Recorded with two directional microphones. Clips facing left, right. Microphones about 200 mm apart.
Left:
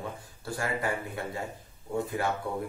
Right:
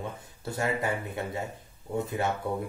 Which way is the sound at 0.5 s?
20° right (ahead or behind).